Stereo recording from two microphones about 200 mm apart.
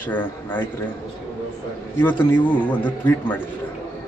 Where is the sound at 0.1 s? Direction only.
10° left (ahead or behind).